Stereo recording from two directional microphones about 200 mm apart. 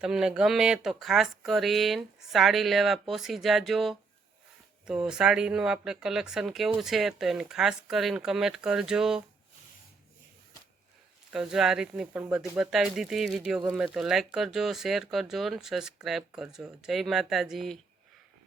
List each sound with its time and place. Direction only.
0.0 s speech: 5° right (ahead or behind)
11.3 s speech: 5° right (ahead or behind)